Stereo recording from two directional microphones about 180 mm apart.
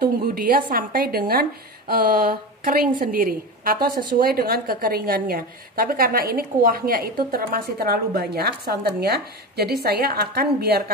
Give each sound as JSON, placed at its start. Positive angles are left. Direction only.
{"t": 0.0, "sound": "a woman's voice", "side_deg": -55}